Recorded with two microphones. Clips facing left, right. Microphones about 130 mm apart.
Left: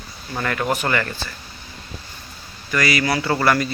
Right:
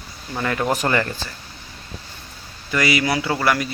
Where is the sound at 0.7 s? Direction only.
30° right (ahead or behind).